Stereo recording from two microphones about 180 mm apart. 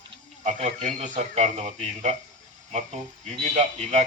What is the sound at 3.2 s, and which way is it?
Speech, 40° right (ahead or behind).